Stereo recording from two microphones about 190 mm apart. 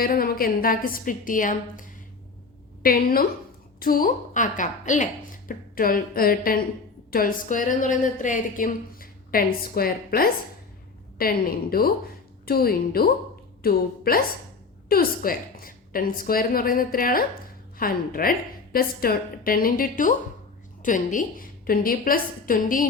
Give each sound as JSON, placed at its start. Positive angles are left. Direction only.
{"t": 0.0, "sound": "a woman's voice", "side_deg": 50}